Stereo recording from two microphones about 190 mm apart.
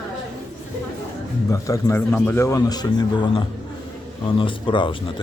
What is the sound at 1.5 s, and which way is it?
Speech, 15° left (ahead or behind).